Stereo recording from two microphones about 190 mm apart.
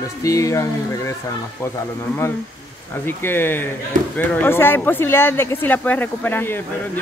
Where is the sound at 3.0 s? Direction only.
10° left (ahead or behind).